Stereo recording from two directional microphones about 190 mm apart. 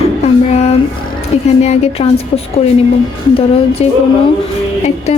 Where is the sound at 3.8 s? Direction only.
30° left (ahead or behind).